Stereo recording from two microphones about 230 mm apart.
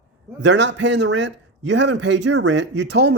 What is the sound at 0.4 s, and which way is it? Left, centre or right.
A man's voice, right.